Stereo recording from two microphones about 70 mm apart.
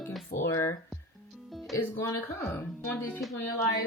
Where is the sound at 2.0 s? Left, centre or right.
Left.